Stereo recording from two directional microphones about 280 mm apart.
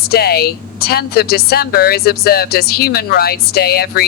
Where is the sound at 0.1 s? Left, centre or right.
Left.